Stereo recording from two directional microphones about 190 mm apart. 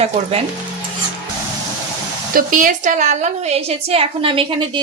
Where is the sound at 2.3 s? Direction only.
45° right (ahead or behind).